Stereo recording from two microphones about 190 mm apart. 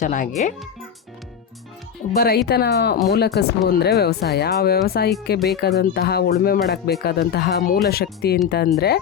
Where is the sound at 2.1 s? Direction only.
55° left (ahead or behind).